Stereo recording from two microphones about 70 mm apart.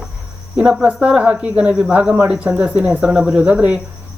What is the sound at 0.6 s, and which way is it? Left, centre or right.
Speech, right.